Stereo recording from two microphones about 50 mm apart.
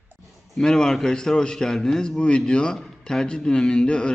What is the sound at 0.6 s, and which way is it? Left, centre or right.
A man's voice, centre.